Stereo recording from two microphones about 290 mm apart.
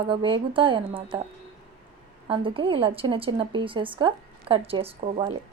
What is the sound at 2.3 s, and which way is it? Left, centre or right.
A woman's voice, centre.